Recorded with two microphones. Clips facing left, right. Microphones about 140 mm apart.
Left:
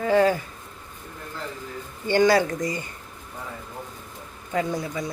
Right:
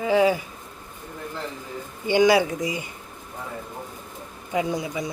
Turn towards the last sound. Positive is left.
turn(degrees=-15)  # may be behind; listen again after turning